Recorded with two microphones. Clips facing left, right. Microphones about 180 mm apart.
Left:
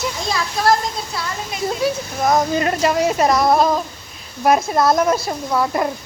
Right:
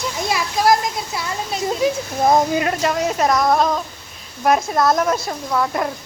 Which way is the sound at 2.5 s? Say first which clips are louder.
Left 2 dB; 5° right (ahead or behind).